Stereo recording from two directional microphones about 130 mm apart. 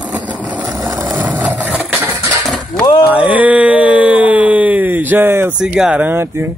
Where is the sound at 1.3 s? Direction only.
10° right (ahead or behind).